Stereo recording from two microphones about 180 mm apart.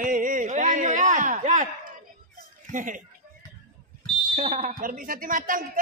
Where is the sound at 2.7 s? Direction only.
45° right (ahead or behind).